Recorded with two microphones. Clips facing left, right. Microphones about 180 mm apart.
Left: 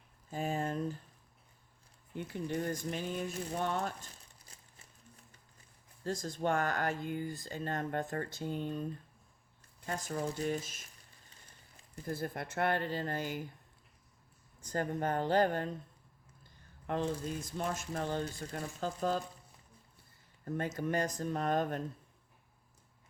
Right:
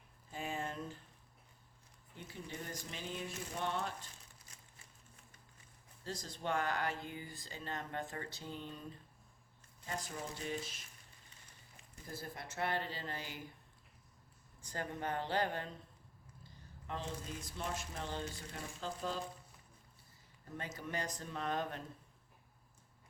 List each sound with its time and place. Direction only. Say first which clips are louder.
0.3 s a sound: left 7 dB; 40° left (ahead or behind)
2.1 s speech: left 11 dB; 60° left (ahead or behind)
4.5 s a sound: left 4 dB; 35° left (ahead or behind)
6.1 s speech: left 7 dB; 50° left (ahead or behind)
9.8 s speech: left 7 dB; 50° left (ahead or behind)
12.0 s speech: left 9 dB; 60° left (ahead or behind)
14.6 s speech: left 7 dB; 45° left (ahead or behind)
16.8 s speech: left 9 dB; 55° left (ahead or behind)
20.4 s speech: left 10 dB; 50° left (ahead or behind)